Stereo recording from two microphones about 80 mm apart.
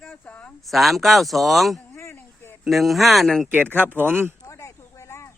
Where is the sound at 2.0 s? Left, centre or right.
Left.